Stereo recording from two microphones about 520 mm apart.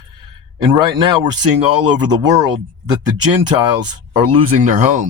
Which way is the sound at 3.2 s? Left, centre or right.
Right.